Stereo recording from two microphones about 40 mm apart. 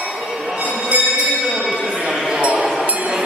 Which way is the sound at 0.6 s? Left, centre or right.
Right.